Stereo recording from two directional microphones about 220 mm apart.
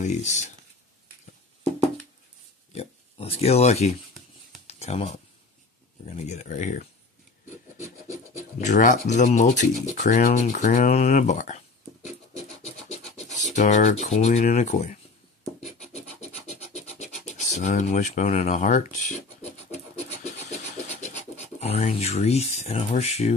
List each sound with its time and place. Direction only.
0.0 s speech: 35° left (ahead or behind)
2.7 s speech: 25° left (ahead or behind)
4.6 s a sound: 30° left (ahead or behind)
6.0 s speech: 30° left (ahead or behind)
7.7 s rub: 15° right (ahead or behind)
8.5 s speech: 35° left (ahead or behind)
13.5 s speech: 35° left (ahead or behind)
15.6 s scratch: 30° left (ahead or behind)